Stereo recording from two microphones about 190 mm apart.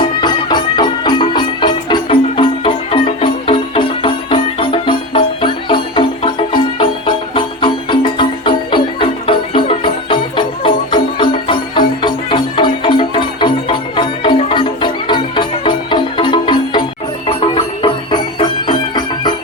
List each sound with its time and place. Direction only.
0.2 s music: 25° left (ahead or behind)